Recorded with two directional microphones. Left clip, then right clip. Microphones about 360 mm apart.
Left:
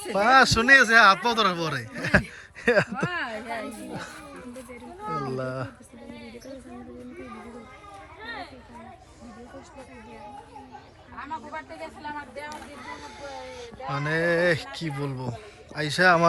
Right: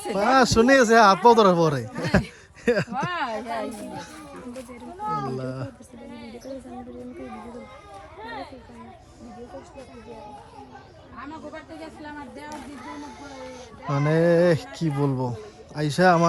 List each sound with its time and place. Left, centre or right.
0.1 s speech: centre
3.3 s music: right
3.7 s music: centre
5.0 s a sound: right
5.3 s speech: centre
12.9 s speech: centre